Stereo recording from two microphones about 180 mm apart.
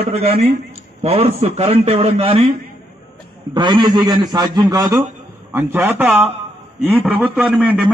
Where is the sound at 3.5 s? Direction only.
25° right (ahead or behind).